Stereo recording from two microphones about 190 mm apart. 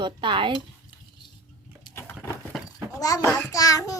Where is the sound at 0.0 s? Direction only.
25° right (ahead or behind).